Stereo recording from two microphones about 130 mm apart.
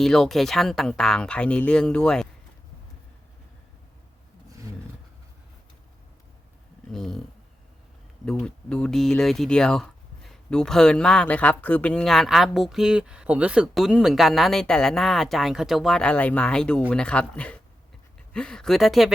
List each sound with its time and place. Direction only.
0.0 s speech: centre (ahead or behind)
6.9 s speech: 5° left (ahead or behind)